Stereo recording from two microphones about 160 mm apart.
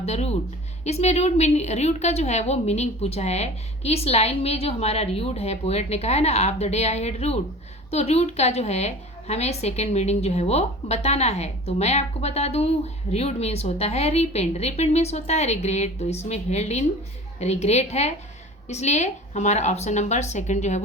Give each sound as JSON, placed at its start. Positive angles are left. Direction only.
{"t": 0.0, "sound": "a woman's voice", "side_deg": 40}